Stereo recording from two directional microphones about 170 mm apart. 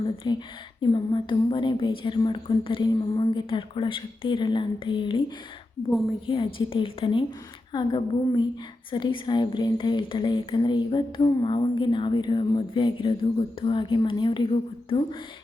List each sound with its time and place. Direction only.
0.0 s speech: 25° left (ahead or behind)
5.9 s a woman's voice: centre (ahead or behind)
6.2 s speech: 30° left (ahead or behind)